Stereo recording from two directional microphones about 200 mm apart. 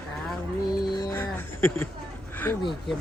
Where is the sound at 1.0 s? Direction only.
10° left (ahead or behind).